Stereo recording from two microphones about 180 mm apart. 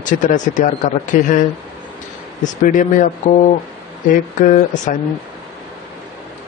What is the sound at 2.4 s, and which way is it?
Speech, 45° left (ahead or behind).